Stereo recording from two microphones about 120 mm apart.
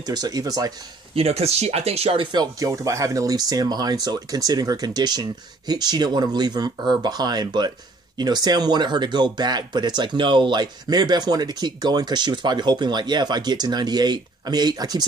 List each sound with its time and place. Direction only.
0.0 s speech: 35° right (ahead or behind)
1.1 s speech: 60° right (ahead or behind)
2.3 s speech: 30° right (ahead or behind)